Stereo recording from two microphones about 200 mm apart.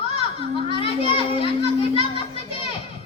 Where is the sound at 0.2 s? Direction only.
25° left (ahead or behind).